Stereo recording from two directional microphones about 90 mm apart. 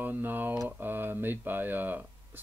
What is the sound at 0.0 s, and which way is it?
Speech, 20° right (ahead or behind).